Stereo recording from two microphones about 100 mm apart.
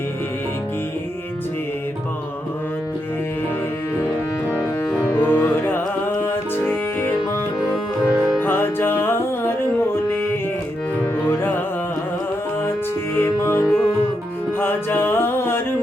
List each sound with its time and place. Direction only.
4.5 s music: 15° left (ahead or behind)
8.4 s music: 20° left (ahead or behind)
11.3 s music: 20° left (ahead or behind)
13.1 s music: 25° left (ahead or behind)